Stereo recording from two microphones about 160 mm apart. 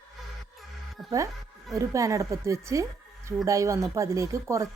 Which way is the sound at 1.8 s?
20° right (ahead or behind).